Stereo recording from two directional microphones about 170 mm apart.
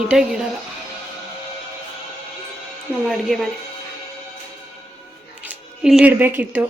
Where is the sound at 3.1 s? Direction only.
Centre (ahead or behind).